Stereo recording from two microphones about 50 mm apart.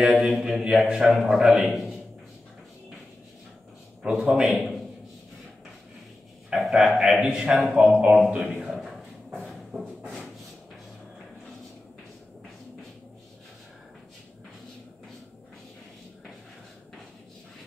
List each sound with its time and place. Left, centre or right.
0.3 s a man's voice: centre
4.0 s a man's voice: centre
6.5 s a man's voice: centre; by 8.2 s right
8.4 s a sound: centre